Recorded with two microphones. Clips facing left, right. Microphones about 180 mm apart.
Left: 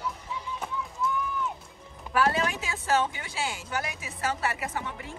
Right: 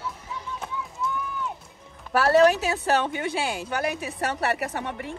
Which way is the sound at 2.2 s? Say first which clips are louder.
Right 8 dB; 70° right (ahead or behind).